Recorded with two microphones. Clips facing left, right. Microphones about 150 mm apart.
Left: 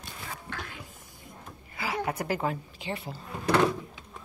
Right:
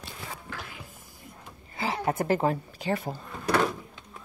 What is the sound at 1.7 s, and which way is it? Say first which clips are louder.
A woman's voice: right 3 dB; 30° right (ahead or behind).